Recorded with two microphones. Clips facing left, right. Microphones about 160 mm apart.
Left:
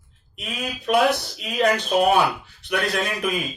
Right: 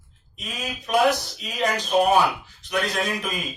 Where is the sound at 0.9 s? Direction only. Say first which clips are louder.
Left 1 dB; 60° left (ahead or behind).